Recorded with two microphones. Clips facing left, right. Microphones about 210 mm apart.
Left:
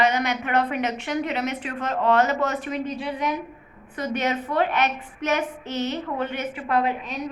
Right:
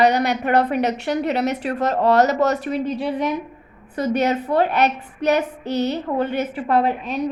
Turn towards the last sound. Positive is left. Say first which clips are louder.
# right 4 dB
turn(degrees=-35)  # may be behind; listen again after turning